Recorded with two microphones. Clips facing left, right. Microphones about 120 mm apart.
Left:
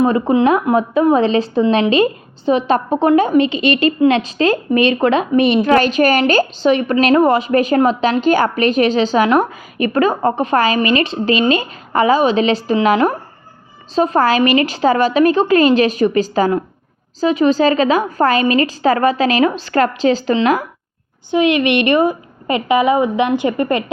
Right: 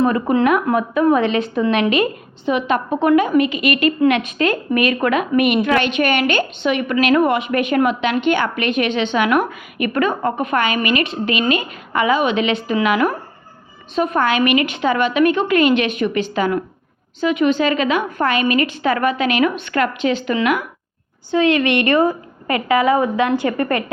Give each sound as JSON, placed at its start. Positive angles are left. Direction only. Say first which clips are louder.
{"t": 0.0, "sound": "a woman's voice", "louder": "left 3 dB", "side_deg": 20}
{"t": 21.2, "sound": "a woman's voice", "louder": "left 2 dB", "side_deg": 15}